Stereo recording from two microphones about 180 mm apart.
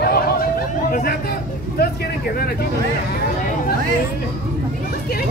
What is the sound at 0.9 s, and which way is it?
Chatter, 50° left (ahead or behind).